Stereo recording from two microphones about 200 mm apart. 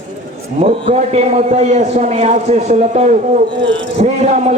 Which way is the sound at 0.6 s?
30° right (ahead or behind).